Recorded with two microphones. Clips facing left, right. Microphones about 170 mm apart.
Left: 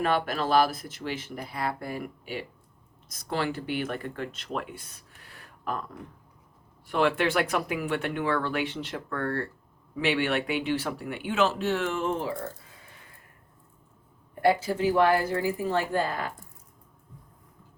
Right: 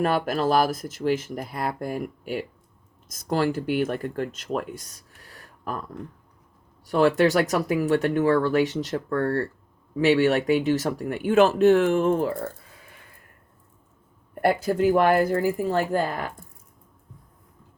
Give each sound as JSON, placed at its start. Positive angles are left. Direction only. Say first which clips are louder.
{"t": 0.0, "sound": "speech", "louder": "right 4 dB", "side_deg": -45}
{"t": 4.5, "sound": "a sound", "louder": "right 6 dB", "side_deg": -40}
{"t": 6.8, "sound": "speech", "louder": "right 6 dB", "side_deg": -40}
{"t": 14.6, "sound": "speech", "louder": "right 4 dB", "side_deg": -55}